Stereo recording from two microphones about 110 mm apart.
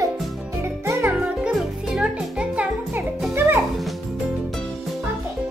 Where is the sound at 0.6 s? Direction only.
25° right (ahead or behind).